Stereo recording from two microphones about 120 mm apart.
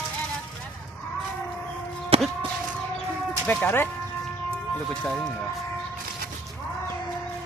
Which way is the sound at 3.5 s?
15° left (ahead or behind).